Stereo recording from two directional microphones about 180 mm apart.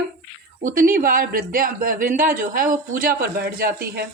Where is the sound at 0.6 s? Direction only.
50° right (ahead or behind).